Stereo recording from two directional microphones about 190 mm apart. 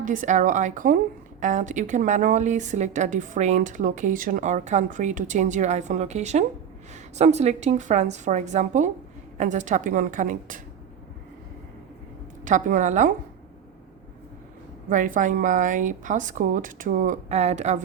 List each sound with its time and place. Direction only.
0.0 s a woman's voice: 45° right (ahead or behind)
12.5 s a woman's voice: 40° right (ahead or behind)
14.8 s a woman's voice: 45° right (ahead or behind)